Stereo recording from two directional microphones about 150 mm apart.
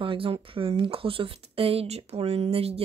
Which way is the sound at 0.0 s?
35° right (ahead or behind).